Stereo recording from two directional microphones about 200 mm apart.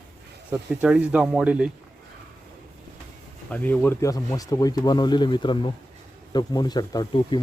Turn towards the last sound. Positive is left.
turn(degrees=20)  # may be behind; listen again after turning